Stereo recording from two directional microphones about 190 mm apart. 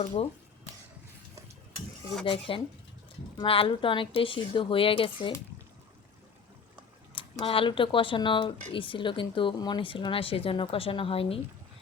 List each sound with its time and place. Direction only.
2.2 s speech: 25° left (ahead or behind)
7.2 s speech: 30° left (ahead or behind)